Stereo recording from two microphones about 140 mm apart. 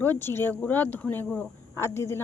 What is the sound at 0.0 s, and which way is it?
A woman's voice, 15° left (ahead or behind).